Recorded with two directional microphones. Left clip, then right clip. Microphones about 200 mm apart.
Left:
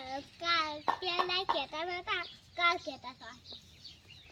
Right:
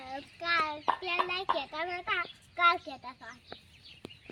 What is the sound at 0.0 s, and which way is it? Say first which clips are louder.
Child singing: even; centre (ahead or behind).